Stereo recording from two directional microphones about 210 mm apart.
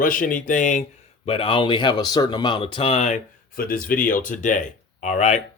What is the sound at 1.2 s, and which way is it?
Speech, 25° left (ahead or behind).